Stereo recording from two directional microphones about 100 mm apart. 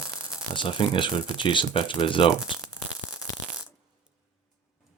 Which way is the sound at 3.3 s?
35° left (ahead or behind).